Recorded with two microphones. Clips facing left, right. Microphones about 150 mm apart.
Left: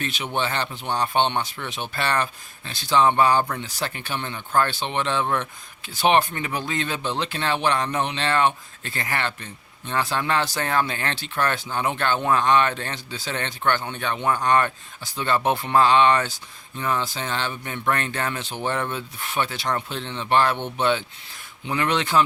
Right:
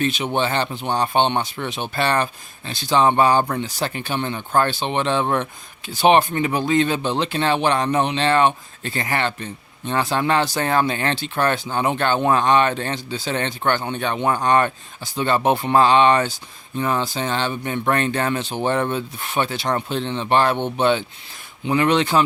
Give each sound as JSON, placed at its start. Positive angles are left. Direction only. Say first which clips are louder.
{"t": 0.0, "sound": "speech", "louder": "right 6 dB", "side_deg": -20}